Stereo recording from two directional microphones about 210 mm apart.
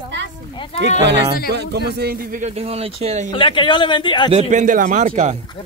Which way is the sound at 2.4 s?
30° right (ahead or behind).